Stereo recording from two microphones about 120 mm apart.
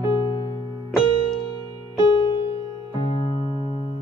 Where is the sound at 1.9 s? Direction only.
40° left (ahead or behind).